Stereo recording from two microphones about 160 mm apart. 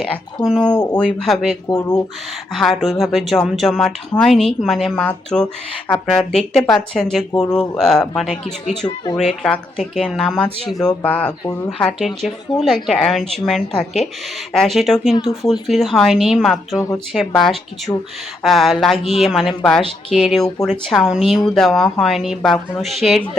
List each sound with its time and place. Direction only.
0.0 s speech: 5° left (ahead or behind)
1.6 s speech: 15° left (ahead or behind)
2.5 s speech: centre (ahead or behind)
16.7 s speech: 20° left (ahead or behind)
17.1 s speech: centre (ahead or behind)